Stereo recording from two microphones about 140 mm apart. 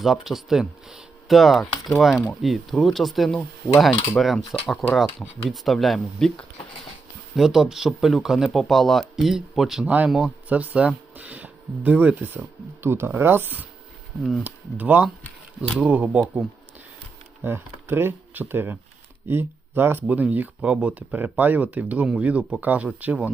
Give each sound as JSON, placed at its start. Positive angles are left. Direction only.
{"t": 0.0, "sound": "speech", "side_deg": 0}
{"t": 17.4, "sound": "speech", "side_deg": -15}